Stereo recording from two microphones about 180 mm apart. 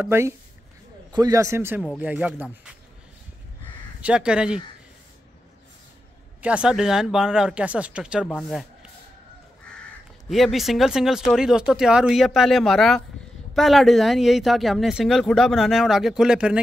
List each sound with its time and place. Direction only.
0.0 s speech: 15° right (ahead or behind)
4.0 s speech: 5° right (ahead or behind)
6.4 s speech: 5° right (ahead or behind)
10.3 s speech: centre (ahead or behind)